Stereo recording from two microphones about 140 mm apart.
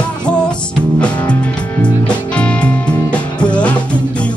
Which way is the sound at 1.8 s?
10° left (ahead or behind).